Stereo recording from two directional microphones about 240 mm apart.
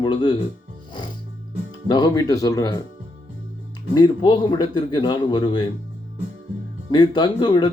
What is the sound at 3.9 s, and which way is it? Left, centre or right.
Speech, centre.